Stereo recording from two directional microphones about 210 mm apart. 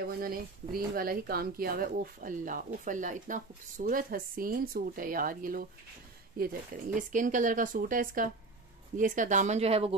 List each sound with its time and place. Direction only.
0.1 s speech: 45° right (ahead or behind); by 9.9 s 30° right (ahead or behind)